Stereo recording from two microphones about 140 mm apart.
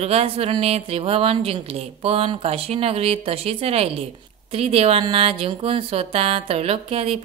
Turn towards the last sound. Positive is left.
turn(degrees=-45)  # may be behind; listen again after turning